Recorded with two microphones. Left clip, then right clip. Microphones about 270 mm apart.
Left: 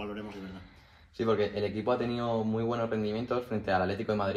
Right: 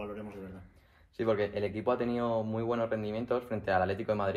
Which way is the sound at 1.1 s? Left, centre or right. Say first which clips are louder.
Left 1 dB; right.